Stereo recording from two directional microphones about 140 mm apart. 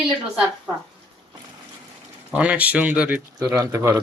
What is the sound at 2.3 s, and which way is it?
Speech, 10° right (ahead or behind).